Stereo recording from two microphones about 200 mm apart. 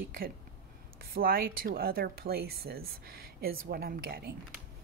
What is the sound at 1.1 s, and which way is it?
Speech, 50° right (ahead or behind).